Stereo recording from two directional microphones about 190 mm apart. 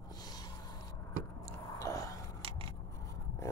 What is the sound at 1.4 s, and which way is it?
Biting, 15° left (ahead or behind).